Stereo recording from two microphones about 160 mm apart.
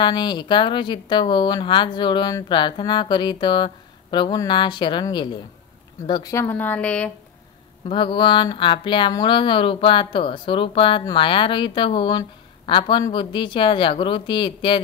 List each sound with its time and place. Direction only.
0.0 s a woman's voice: 25° left (ahead or behind); by 7.1 s 10° left (ahead or behind)
7.9 s speech: 30° left (ahead or behind)